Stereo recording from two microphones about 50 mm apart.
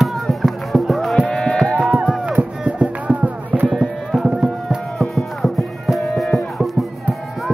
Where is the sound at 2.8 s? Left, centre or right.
Right.